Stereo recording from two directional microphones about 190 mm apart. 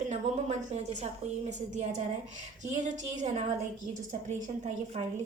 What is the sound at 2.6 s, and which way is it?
Speech, 40° right (ahead or behind).